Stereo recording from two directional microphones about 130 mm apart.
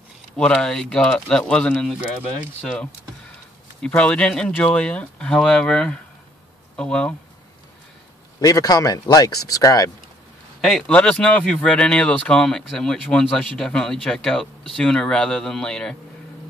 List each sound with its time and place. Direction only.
0.4 s speech: 5° left (ahead or behind)
3.8 s speech: 10° left (ahead or behind)
8.4 s speech: 25° left (ahead or behind)
10.6 s speech: 5° left (ahead or behind)